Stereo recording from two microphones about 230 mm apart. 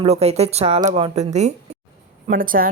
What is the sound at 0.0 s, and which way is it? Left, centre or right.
Speech, right.